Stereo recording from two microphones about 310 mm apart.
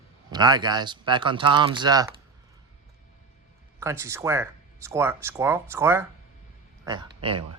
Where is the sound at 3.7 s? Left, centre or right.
Centre.